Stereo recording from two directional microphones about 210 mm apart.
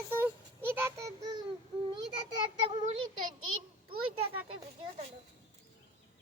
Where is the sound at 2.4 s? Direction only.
25° right (ahead or behind).